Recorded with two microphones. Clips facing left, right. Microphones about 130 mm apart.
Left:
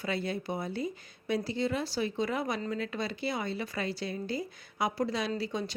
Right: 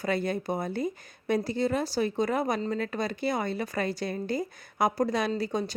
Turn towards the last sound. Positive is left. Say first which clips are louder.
# right 4 dB
turn(degrees=-40)  # may be behind; listen again after turning